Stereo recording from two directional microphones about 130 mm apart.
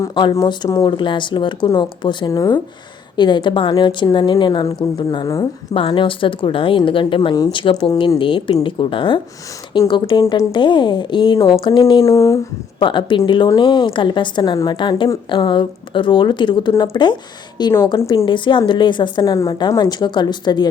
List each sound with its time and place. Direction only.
0.1 s a woman's voice: 35° left (ahead or behind)
12.8 s a woman's voice: 40° left (ahead or behind)
18.3 s a woman's voice: 40° left (ahead or behind)